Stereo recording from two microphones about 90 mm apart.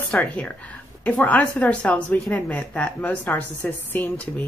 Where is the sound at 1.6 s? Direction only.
15° left (ahead or behind).